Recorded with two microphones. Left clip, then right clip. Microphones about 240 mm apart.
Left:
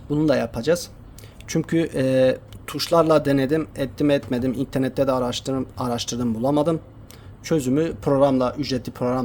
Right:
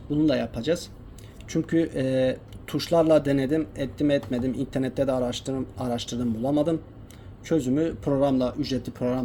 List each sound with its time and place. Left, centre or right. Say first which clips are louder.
0.1 s speech: left 3 dB; left